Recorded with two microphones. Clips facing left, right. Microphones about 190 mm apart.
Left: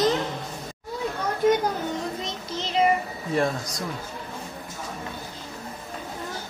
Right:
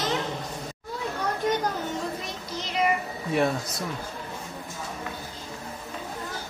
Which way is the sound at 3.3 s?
5° right (ahead or behind).